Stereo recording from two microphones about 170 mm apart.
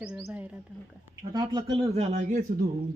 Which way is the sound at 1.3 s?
25° right (ahead or behind).